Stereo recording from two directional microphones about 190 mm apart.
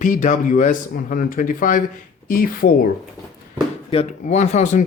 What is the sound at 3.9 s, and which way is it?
Speech, 35° left (ahead or behind).